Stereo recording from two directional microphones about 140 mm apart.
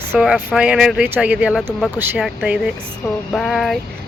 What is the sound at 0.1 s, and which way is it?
Speech, 5° right (ahead or behind).